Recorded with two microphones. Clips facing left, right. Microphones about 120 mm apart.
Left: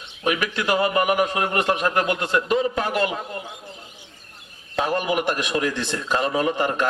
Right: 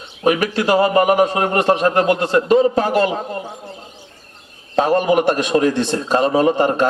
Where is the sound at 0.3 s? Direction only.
40° right (ahead or behind).